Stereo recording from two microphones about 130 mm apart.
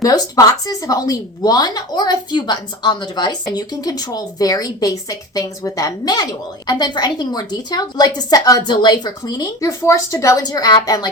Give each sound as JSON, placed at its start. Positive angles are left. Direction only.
{"t": 0.0, "sound": "a woman's voice", "side_deg": 30}